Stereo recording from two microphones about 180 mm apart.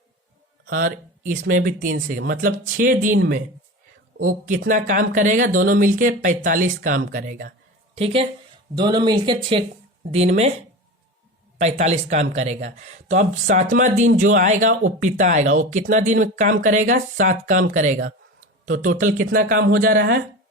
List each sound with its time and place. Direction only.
0.7 s speech: 50° right (ahead or behind)
4.2 s speech: 45° right (ahead or behind)
7.9 s speech: 30° right (ahead or behind)
11.5 s speech: 40° right (ahead or behind); by 20.1 s 55° right (ahead or behind)